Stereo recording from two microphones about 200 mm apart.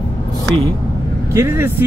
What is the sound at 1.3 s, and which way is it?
Speech, 15° right (ahead or behind).